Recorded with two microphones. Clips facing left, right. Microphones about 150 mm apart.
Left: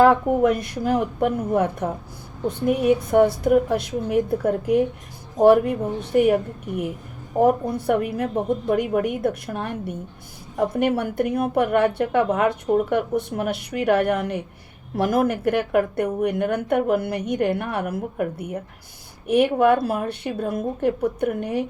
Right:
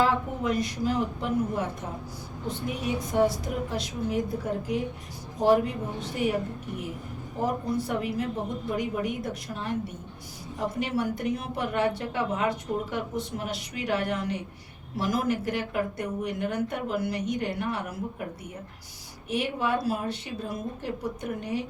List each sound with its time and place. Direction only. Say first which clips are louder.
0.0 s a woman's voice: left 10 dB; 60° left (ahead or behind)
7.4 s a woman's voice: left 8 dB; 55° left (ahead or behind)